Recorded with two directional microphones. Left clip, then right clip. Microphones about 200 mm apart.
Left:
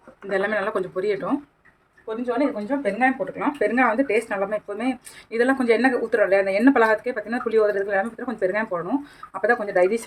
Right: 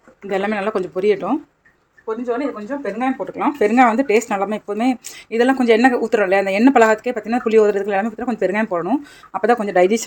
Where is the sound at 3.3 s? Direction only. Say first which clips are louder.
Right 6 dB; 35° right (ahead or behind).